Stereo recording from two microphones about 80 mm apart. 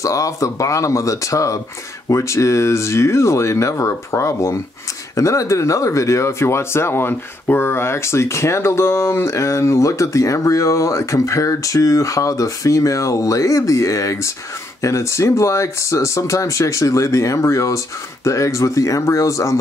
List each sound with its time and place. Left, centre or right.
0.0 s speech: left